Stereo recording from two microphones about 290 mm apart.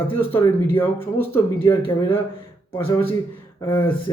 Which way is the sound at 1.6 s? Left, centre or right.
Centre.